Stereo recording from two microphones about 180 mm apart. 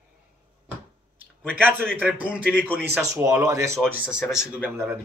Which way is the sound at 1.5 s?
10° right (ahead or behind).